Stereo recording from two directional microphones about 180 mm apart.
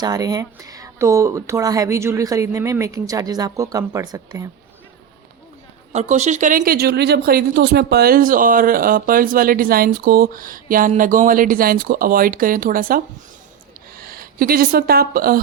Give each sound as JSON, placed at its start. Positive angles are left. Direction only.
{"t": 0.0, "sound": "speech", "side_deg": -20}
{"t": 5.9, "sound": "speech", "side_deg": -40}
{"t": 14.0, "sound": "speech", "side_deg": -55}